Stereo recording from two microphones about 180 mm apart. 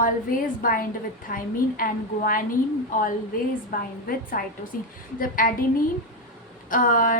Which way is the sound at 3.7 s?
50° left (ahead or behind).